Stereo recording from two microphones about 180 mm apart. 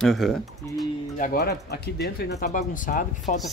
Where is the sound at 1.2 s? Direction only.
60° left (ahead or behind).